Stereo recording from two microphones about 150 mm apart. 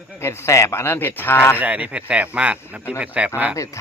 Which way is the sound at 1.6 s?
10° right (ahead or behind).